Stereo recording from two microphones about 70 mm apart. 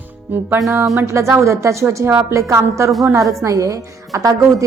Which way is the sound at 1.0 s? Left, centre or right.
Right.